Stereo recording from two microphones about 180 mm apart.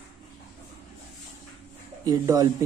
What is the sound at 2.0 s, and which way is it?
Speech, 20° right (ahead or behind).